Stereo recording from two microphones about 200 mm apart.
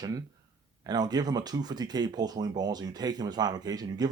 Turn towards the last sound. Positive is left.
turn(degrees=-20)  # may be behind; listen again after turning